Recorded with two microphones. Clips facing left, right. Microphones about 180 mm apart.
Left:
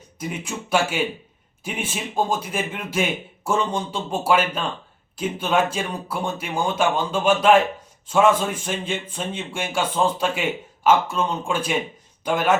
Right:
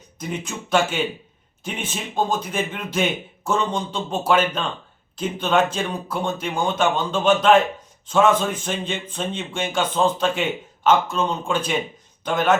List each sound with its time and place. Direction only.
0.2 s speech: 10° left (ahead or behind)